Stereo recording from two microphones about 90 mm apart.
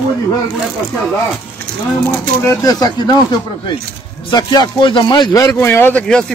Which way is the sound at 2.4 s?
45° left (ahead or behind).